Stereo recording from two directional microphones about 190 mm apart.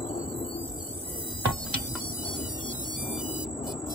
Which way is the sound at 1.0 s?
25° left (ahead or behind).